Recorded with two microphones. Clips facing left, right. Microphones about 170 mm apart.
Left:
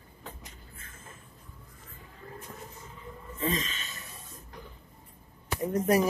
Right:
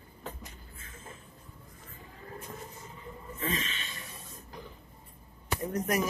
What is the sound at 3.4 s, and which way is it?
Snort, 40° left (ahead or behind).